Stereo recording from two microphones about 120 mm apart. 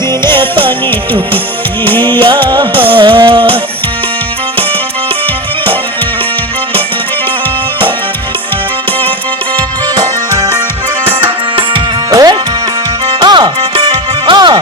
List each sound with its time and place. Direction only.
0.3 s music: 45° right (ahead or behind)
2.0 s music: 40° right (ahead or behind)
9.9 s music: 30° right (ahead or behind)
12.1 s music: 30° right (ahead or behind)
13.1 s music: 40° right (ahead or behind)